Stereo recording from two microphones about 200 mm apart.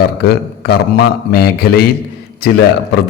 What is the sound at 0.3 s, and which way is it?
A man's voice, 50° left (ahead or behind).